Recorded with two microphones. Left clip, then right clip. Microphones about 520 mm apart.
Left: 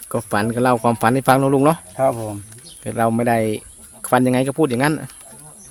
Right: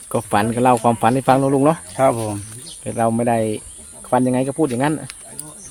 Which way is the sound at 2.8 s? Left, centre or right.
Left.